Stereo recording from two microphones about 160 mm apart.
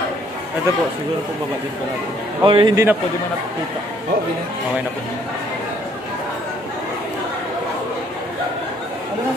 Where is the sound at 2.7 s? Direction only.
15° right (ahead or behind).